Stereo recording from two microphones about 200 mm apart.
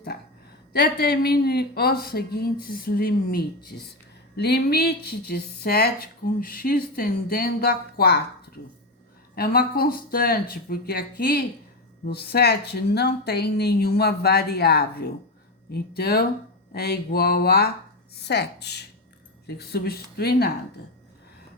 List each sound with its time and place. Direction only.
0.7 s speech: 50° left (ahead or behind)
9.3 s speech: 50° left (ahead or behind)